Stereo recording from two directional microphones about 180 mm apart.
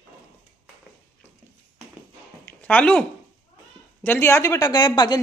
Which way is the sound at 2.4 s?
10° left (ahead or behind).